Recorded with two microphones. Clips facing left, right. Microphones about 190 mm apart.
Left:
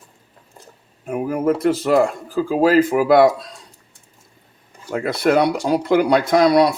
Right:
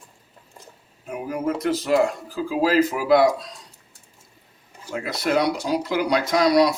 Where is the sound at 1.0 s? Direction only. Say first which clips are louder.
Left 7 dB; 55° left (ahead or behind).